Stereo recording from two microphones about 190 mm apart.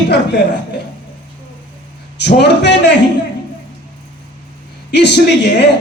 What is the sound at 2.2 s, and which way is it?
Speech, 65° left (ahead or behind).